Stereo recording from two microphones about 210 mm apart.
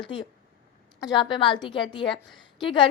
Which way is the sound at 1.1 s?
25° left (ahead or behind).